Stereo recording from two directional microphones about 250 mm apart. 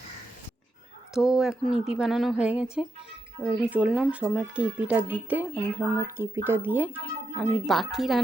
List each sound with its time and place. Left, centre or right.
1.3 s speech: centre